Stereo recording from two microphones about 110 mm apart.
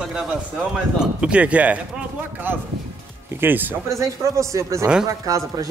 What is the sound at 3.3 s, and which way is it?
Speech, 15° right (ahead or behind).